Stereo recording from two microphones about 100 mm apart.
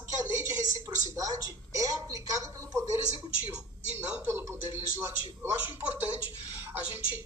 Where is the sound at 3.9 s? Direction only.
20° right (ahead or behind).